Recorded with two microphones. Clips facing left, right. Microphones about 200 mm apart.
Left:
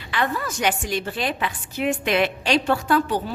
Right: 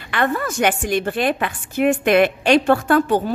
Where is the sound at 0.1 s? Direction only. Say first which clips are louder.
Right 4 dB; 55° right (ahead or behind).